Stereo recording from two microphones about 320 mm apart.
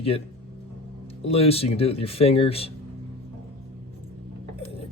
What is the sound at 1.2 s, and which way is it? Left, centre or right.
Cutlery, centre.